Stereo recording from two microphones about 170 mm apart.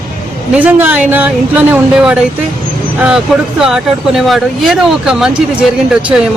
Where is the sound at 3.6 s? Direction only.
Centre (ahead or behind).